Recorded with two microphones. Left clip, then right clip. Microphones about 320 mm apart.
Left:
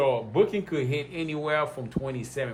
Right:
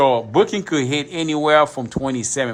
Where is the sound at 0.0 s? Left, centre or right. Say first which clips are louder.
Right 8 dB; right.